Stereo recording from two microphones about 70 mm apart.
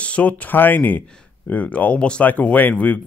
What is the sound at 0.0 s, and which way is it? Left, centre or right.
A man's voice, centre.